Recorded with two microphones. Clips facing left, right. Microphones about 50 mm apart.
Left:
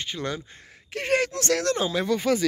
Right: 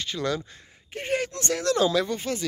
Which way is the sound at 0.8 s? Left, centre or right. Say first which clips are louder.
Left 4 dB; left.